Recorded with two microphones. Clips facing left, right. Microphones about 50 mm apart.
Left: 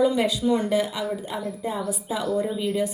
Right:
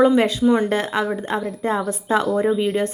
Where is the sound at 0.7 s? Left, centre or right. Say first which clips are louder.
Right 3 dB; right.